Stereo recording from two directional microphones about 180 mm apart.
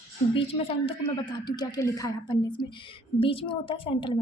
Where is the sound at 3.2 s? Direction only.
30° left (ahead or behind).